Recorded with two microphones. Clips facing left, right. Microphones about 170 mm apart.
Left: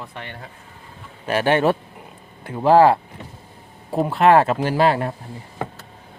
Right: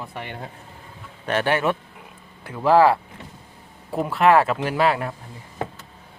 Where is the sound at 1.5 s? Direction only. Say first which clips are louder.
Left 7 dB; 30° left (ahead or behind).